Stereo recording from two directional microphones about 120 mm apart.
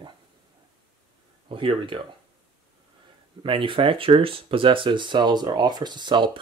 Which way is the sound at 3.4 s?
45° right (ahead or behind).